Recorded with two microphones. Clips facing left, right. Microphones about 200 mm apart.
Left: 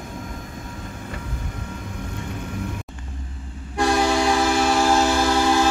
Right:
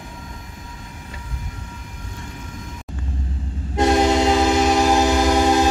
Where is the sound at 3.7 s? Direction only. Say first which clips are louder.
Right 3 dB; 20° right (ahead or behind).